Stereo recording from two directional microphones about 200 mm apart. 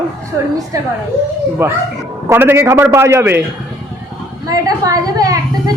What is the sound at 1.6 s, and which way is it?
A man's voice, 15° right (ahead or behind).